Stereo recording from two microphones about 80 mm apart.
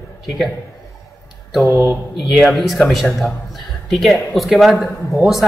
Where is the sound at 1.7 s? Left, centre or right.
Right.